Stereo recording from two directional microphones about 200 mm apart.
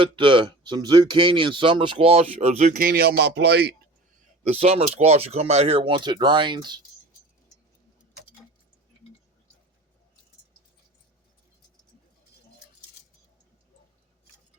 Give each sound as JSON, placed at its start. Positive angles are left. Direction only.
{"t": 0.0, "sound": "speech", "side_deg": -25}
{"t": 4.4, "sound": "speech", "side_deg": -30}